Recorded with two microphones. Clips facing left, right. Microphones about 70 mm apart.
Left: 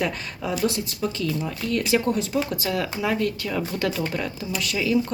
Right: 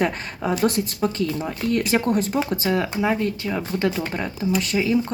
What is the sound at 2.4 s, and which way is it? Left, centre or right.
Speech, right.